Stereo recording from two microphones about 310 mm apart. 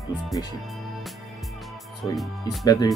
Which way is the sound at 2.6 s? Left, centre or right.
Centre.